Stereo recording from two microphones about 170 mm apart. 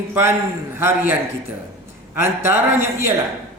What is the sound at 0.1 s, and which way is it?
A man's voice, 15° right (ahead or behind).